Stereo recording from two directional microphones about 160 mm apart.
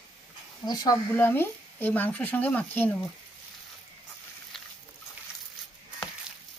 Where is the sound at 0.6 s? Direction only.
25° left (ahead or behind).